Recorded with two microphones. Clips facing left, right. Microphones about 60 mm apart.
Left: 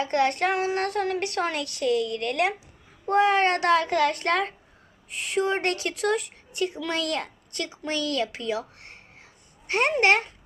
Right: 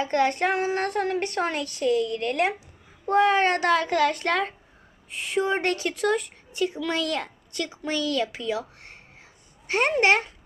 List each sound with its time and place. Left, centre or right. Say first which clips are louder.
0.0 s a child's voice: even; centre
6.0 s a child's voice: right 1 dB; centre